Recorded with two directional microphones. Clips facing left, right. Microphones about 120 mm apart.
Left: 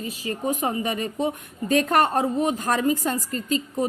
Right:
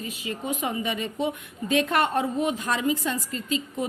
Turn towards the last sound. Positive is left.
turn(degrees=40)  # may be behind; listen again after turning